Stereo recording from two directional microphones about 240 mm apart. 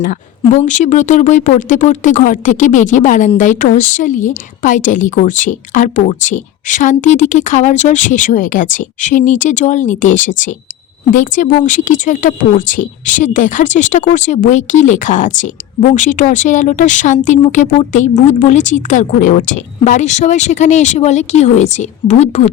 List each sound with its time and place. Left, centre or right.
0.5 s speech: left